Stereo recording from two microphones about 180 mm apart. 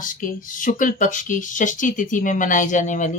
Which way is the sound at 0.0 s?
50° left (ahead or behind).